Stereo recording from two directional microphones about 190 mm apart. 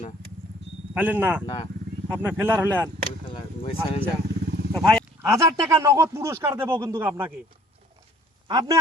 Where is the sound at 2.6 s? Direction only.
10° left (ahead or behind).